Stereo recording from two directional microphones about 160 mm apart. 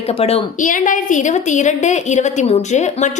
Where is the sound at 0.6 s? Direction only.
55° left (ahead or behind).